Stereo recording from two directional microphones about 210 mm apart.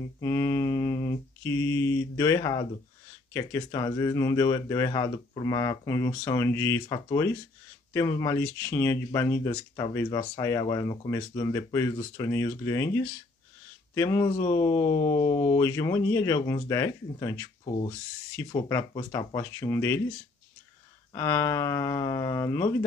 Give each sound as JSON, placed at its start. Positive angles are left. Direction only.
{"t": 0.2, "sound": "mantra", "side_deg": 10}
{"t": 3.3, "sound": "speech", "side_deg": 15}
{"t": 14.6, "sound": "a sound", "side_deg": 20}
{"t": 15.0, "sound": "speech", "side_deg": 20}